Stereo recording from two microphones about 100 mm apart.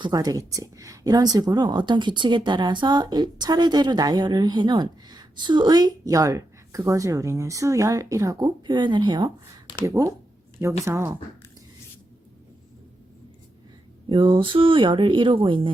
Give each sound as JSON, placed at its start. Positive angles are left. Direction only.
{"t": 0.1, "sound": "speech", "side_deg": -40}
{"t": 9.8, "sound": "speech", "side_deg": -30}
{"t": 14.1, "sound": "speech", "side_deg": -55}